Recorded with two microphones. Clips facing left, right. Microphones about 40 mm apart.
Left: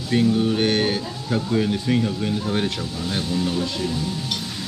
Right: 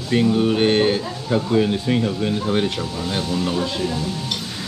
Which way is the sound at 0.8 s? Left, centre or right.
Centre.